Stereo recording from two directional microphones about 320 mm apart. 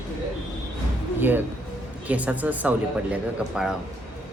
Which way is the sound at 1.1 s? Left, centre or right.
Centre.